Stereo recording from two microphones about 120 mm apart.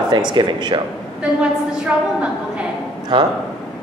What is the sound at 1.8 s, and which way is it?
Speech, 10° right (ahead or behind).